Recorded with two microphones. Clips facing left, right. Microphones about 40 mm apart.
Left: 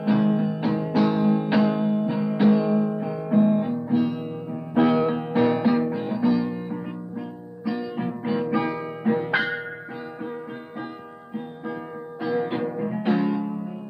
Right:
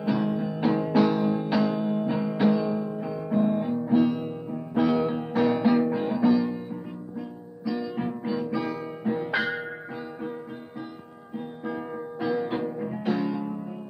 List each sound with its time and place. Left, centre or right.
0.0 s music: centre
0.6 s music: centre
2.0 s music: centre
4.5 s music: left
5.5 s music: centre
7.2 s music: centre
8.3 s music: left
11.3 s music: centre
12.4 s music: centre